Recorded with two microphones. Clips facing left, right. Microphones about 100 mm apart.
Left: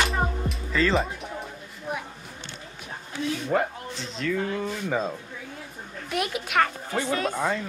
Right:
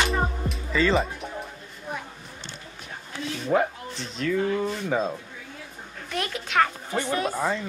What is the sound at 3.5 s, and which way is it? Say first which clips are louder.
Speech: right 5 dB; 5° right (ahead or behind).